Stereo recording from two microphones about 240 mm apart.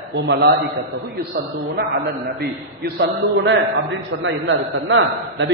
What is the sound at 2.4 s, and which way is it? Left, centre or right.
A man's voice, right.